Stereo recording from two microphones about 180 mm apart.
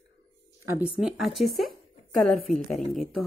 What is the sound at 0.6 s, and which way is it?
Speech, 15° right (ahead or behind).